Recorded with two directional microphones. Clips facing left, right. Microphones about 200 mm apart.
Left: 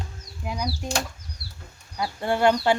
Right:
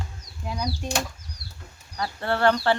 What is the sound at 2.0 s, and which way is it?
Speech, 15° left (ahead or behind).